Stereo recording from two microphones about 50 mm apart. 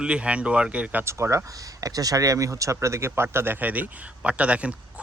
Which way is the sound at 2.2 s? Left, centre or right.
Right.